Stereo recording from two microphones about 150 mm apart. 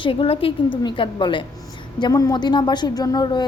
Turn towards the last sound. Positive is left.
turn(degrees=25)  # may be behind; listen again after turning